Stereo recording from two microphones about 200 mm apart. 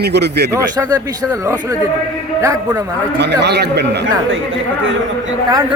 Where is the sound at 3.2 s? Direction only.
60° right (ahead or behind).